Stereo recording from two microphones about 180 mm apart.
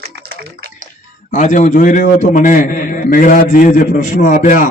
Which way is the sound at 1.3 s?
45° left (ahead or behind).